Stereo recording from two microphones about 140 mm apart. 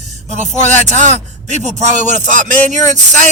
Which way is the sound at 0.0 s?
55° right (ahead or behind).